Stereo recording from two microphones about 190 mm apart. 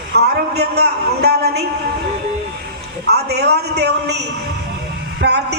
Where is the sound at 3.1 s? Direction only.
60° right (ahead or behind).